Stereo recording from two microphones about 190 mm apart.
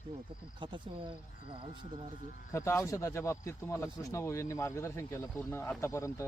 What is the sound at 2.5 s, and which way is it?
Speech, 15° left (ahead or behind).